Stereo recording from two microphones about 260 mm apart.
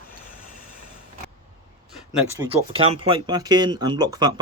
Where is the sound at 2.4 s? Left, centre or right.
Centre.